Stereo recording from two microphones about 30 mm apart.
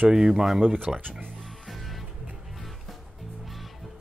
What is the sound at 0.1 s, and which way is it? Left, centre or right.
Speech, centre.